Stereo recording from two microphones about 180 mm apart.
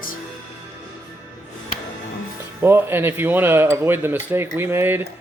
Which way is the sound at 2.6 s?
10° right (ahead or behind).